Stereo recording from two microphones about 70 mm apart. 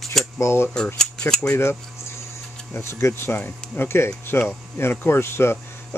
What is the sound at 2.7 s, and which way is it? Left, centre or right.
Speech, left.